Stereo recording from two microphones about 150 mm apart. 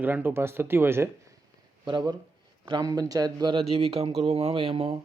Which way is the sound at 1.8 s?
30° right (ahead or behind).